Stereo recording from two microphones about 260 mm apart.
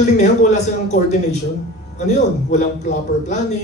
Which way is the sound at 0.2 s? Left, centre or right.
Left.